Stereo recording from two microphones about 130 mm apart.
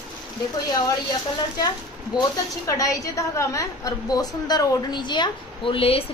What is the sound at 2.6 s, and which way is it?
A woman's voice, 25° left (ahead or behind).